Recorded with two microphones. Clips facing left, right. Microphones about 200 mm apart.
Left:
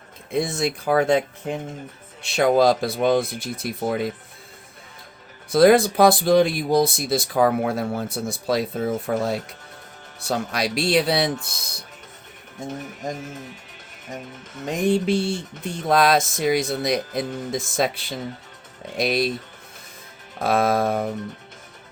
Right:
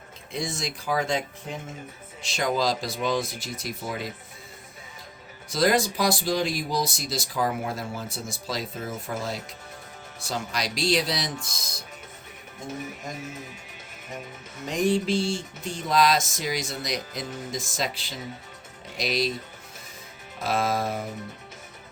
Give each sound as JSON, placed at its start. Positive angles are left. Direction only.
{"t": 0.3, "sound": "speech", "side_deg": 60}
{"t": 5.5, "sound": "speech", "side_deg": 60}
{"t": 15.0, "sound": "speech", "side_deg": 60}
{"t": 20.4, "sound": "speech", "side_deg": 60}